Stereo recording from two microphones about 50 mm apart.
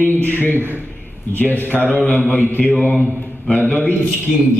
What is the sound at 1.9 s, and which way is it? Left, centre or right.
Mantra, left.